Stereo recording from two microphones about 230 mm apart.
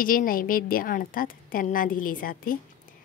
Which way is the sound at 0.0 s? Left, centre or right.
Left.